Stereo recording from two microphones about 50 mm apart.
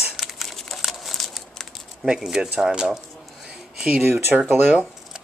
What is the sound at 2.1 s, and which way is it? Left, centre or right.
Speech, centre.